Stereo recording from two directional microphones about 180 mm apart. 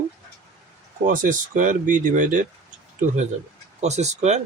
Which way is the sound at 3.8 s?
40° right (ahead or behind).